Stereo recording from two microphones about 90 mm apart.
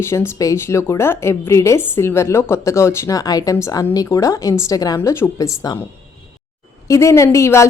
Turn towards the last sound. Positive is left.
turn(degrees=35)  # may be behind; listen again after turning